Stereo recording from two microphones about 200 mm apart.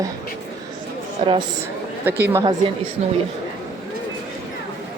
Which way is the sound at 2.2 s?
15° right (ahead or behind).